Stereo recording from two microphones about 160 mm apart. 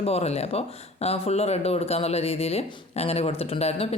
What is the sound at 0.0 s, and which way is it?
Speech, 40° left (ahead or behind).